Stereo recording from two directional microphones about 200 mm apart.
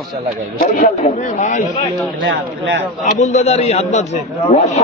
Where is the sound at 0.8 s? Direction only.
40° left (ahead or behind).